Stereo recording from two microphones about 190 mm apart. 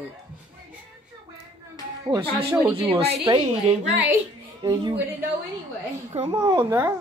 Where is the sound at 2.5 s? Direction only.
10° right (ahead or behind).